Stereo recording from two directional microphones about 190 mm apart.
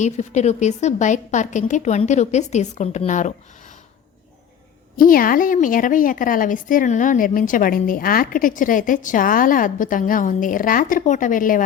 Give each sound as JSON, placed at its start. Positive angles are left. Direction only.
{"t": 0.0, "sound": "a woman's voice", "side_deg": 35}
{"t": 4.9, "sound": "a woman's voice", "side_deg": 50}